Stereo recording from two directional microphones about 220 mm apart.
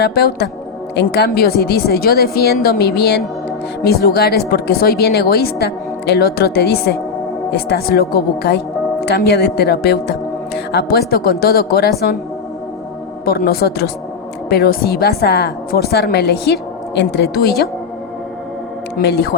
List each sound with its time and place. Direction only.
0.0 s a woman's voice: 45° left (ahead or behind)
13.2 s a woman's voice: 45° left (ahead or behind)
18.9 s a woman's voice: 50° left (ahead or behind)